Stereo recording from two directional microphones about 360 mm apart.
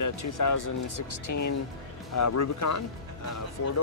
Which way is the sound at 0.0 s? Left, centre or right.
Left.